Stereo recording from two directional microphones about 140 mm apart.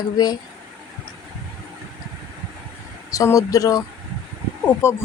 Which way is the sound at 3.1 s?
25° left (ahead or behind).